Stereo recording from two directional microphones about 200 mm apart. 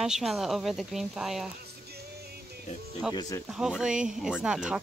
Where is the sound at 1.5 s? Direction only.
55° right (ahead or behind).